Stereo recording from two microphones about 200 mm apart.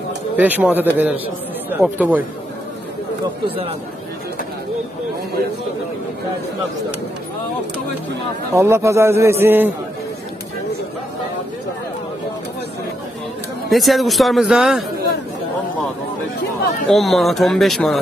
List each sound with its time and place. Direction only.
0.4 s a man's voice: 10° right (ahead or behind)
3.4 s speech: 30° right (ahead or behind)
8.5 s a man's voice: 15° right (ahead or behind)
13.7 s a man's voice: centre (ahead or behind)
16.9 s a man's voice: centre (ahead or behind)